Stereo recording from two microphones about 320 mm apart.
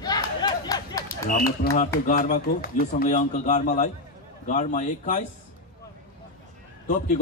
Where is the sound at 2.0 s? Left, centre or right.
Left.